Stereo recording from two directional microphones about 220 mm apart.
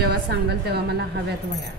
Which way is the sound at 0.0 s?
50° right (ahead or behind).